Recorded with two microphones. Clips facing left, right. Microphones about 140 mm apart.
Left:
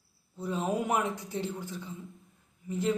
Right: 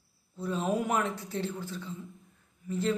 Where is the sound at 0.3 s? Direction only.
15° left (ahead or behind).